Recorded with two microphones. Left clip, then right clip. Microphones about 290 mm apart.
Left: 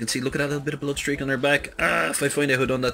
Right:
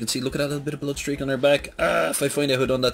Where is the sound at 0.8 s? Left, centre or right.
Right.